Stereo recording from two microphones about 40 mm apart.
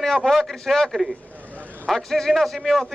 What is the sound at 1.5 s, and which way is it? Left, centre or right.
Vehicle, right.